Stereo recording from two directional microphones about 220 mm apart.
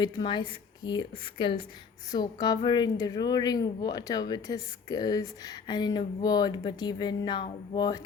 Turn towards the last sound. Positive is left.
turn(degrees=20)  # may be behind; listen again after turning